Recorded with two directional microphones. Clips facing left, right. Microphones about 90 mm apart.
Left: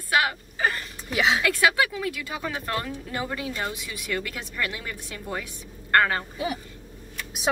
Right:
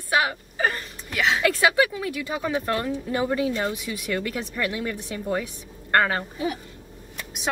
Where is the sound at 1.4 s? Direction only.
25° right (ahead or behind).